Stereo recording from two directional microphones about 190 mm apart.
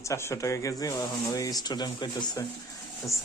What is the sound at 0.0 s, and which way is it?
Speech, 15° left (ahead or behind).